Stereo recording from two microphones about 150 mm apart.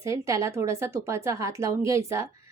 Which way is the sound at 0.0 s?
20° right (ahead or behind).